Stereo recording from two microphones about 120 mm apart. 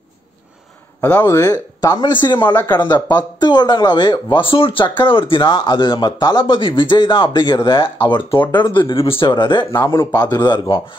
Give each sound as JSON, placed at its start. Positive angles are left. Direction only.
{"t": 1.0, "sound": "speech", "side_deg": 20}